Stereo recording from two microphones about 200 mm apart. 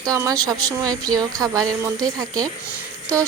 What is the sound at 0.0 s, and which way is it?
Speech, 15° right (ahead or behind).